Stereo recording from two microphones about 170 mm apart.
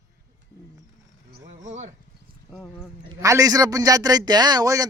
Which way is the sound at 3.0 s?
20° right (ahead or behind).